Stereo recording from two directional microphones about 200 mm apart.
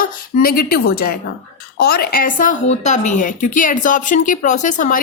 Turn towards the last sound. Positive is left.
turn(degrees=40)  # may be behind; listen again after turning